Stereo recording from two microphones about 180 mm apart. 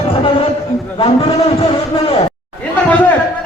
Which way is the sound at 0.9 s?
30° left (ahead or behind).